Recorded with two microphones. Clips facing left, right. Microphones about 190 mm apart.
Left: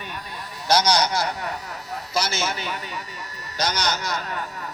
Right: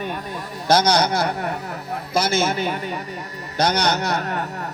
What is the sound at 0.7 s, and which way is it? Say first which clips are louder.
A man's voice: right 3 dB; 55° right (ahead or behind).